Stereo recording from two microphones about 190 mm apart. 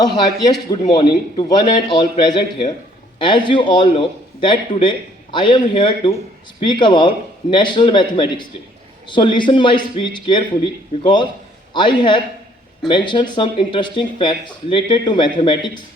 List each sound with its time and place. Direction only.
0.7 s speech: 25° left (ahead or behind)